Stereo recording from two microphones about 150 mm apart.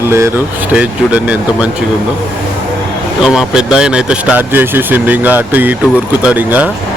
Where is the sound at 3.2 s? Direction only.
5° right (ahead or behind).